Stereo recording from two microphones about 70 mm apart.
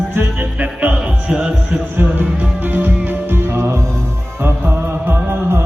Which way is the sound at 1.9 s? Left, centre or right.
Right.